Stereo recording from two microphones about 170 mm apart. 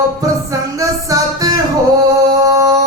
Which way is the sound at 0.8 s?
20° right (ahead or behind).